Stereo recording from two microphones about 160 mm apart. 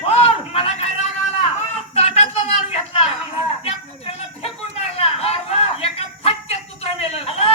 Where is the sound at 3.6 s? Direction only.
35° left (ahead or behind).